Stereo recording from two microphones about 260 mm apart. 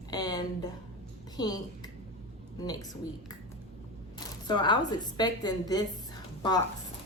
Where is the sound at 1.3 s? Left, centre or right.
Centre.